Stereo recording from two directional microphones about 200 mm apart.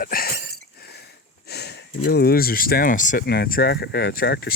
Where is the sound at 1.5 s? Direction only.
55° left (ahead or behind).